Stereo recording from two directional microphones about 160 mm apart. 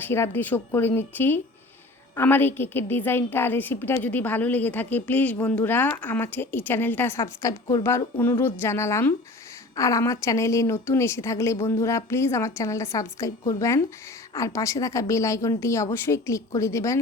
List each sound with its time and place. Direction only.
0.0 s a woman's voice: 15° left (ahead or behind)